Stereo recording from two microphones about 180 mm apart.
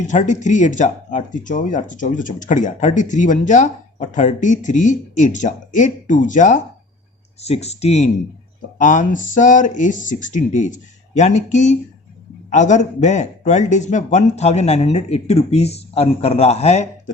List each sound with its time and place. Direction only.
0.0 s speech: 45° left (ahead or behind)